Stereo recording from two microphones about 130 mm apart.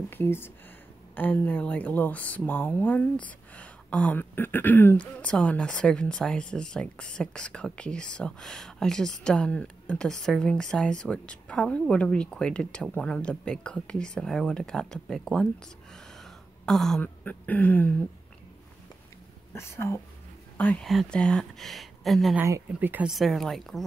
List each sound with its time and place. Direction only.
0.1 s speech: 15° left (ahead or behind)
15.9 s a sound: centre (ahead or behind)
17.0 s speech: 15° left (ahead or behind)
19.5 s speech: 20° left (ahead or behind)
20.8 s speech: centre (ahead or behind)
22.7 s speech: 15° right (ahead or behind)
23.1 s speech: centre (ahead or behind)